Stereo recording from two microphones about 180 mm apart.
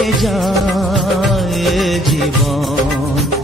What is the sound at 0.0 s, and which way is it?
Music of bollywood, centre (ahead or behind).